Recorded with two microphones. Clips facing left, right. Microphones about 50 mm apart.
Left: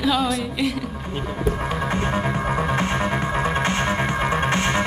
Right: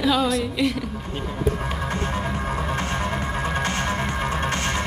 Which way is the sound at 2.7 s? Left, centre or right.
Left.